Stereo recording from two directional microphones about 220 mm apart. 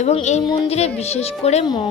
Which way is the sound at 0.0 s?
30° left (ahead or behind).